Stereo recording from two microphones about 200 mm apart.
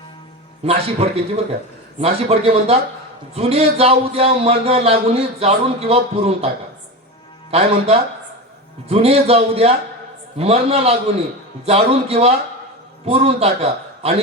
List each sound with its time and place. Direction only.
0.6 s speech: 30° right (ahead or behind)
7.5 s speech: 30° right (ahead or behind)